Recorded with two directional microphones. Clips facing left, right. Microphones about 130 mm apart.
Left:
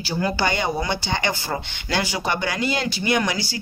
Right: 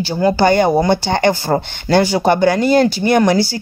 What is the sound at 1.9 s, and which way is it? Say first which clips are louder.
Speech: right 11 dB; 40° right (ahead or behind).